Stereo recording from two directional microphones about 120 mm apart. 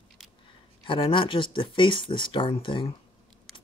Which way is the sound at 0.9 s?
45° left (ahead or behind).